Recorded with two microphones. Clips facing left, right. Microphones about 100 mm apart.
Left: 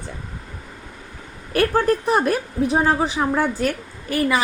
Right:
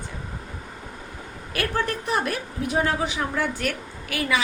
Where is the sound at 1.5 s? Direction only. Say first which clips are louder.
Left 8 dB; 45° left (ahead or behind).